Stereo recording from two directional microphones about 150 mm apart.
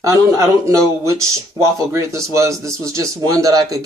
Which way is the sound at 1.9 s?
20° right (ahead or behind).